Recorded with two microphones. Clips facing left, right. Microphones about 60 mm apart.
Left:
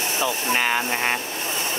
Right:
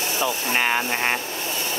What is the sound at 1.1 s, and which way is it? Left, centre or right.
Vehicle, left.